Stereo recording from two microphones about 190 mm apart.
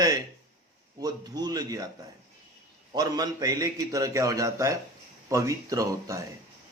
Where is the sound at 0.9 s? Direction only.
20° right (ahead or behind).